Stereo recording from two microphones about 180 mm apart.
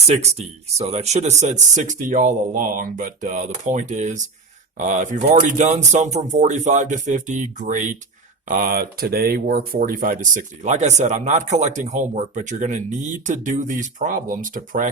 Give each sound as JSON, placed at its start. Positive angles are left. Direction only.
{"t": 0.1, "sound": "speech", "side_deg": -35}